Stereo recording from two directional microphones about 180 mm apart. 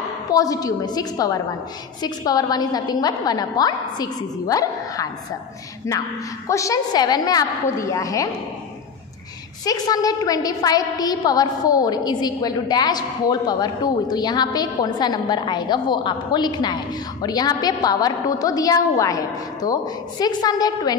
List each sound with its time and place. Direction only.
0.3 s a woman's voice: 20° left (ahead or behind)
9.7 s a woman's voice: 20° left (ahead or behind)